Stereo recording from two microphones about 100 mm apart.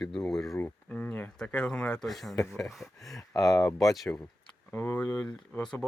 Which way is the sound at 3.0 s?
35° left (ahead or behind).